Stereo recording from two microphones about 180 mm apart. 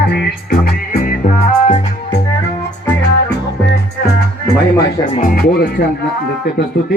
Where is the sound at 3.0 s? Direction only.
70° left (ahead or behind).